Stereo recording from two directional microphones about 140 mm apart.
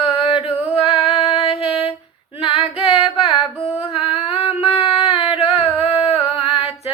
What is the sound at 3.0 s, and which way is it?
Female singing, 5° right (ahead or behind).